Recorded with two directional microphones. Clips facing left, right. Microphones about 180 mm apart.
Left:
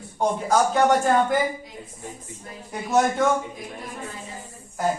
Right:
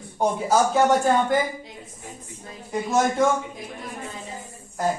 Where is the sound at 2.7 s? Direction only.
Centre (ahead or behind).